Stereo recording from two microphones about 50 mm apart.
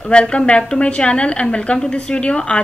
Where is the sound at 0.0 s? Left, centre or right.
Left.